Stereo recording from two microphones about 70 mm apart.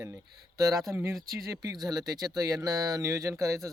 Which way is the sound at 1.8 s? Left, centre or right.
Right.